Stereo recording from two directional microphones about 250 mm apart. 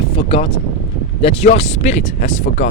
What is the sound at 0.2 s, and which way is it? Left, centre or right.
Speech, left.